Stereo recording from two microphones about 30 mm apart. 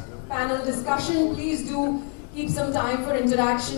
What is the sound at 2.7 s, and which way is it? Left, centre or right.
A woman's voice, centre.